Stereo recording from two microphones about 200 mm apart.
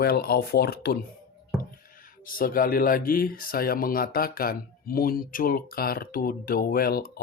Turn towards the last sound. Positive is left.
turn(degrees=50)  # may be behind; listen again after turning